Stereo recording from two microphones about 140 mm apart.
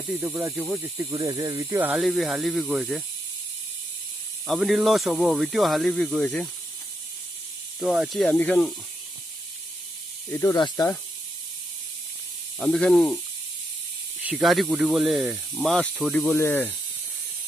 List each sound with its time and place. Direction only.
0.1 s speech: 15° right (ahead or behind)
2.0 s speech: centre (ahead or behind)
4.5 s speech: centre (ahead or behind)
7.8 s speech: 5° right (ahead or behind)
8.3 s speech: 10° left (ahead or behind)
10.3 s speech: 30° left (ahead or behind)
12.5 s speech: 5° left (ahead or behind)
14.2 s speech: centre (ahead or behind)
16.3 s speech: 15° left (ahead or behind)